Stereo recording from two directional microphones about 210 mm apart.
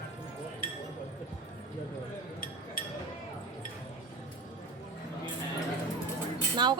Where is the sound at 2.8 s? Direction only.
45° left (ahead or behind).